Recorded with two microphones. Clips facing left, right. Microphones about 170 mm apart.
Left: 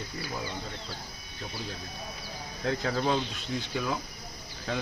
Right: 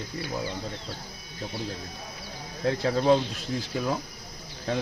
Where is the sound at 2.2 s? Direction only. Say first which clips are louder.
Right 5 dB; 30° right (ahead or behind).